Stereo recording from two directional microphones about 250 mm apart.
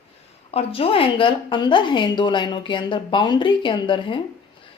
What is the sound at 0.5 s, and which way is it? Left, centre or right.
A woman's voice, left.